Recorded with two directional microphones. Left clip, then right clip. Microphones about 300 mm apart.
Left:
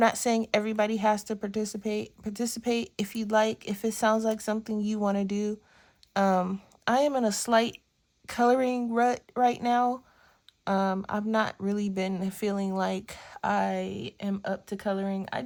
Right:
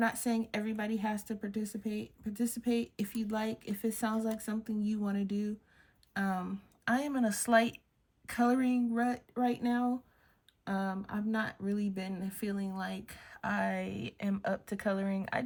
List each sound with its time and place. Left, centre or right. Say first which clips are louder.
0.0 s a woman's voice: left 9 dB; centre